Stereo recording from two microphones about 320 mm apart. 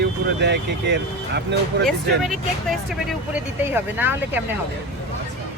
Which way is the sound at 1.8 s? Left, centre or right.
Centre.